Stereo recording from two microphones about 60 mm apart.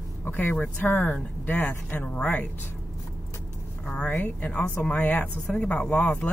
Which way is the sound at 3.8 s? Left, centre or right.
Centre.